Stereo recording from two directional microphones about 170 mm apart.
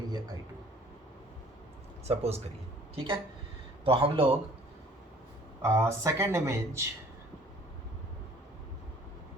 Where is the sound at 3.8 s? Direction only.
30° right (ahead or behind).